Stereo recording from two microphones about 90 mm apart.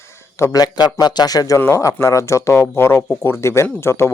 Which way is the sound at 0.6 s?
50° left (ahead or behind).